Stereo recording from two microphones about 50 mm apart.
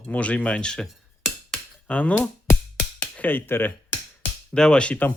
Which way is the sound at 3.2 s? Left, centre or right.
Left.